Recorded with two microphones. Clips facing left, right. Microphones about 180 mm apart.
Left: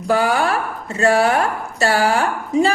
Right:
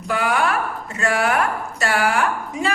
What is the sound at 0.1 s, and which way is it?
A woman's voice, 30° left (ahead or behind).